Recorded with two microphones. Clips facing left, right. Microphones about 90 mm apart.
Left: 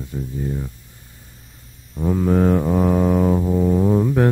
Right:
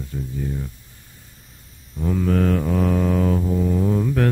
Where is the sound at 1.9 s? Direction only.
20° left (ahead or behind).